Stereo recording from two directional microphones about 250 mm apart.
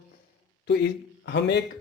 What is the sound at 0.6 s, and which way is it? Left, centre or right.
Speech, left.